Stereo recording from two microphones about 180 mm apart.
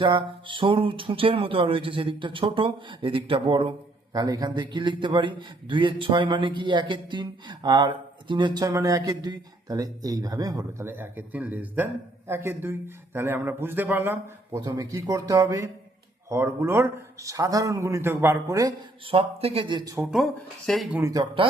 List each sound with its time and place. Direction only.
0.0 s a man's voice: 25° right (ahead or behind)
19.1 s speech: 30° right (ahead or behind)
20.0 s speech: 5° right (ahead or behind)
21.0 s a man's voice: 20° right (ahead or behind)